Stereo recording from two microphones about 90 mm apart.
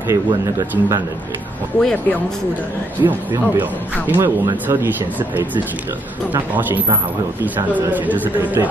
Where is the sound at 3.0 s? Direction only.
50° right (ahead or behind).